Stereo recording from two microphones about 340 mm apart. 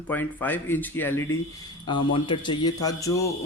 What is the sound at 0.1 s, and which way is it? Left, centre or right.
Speech, centre.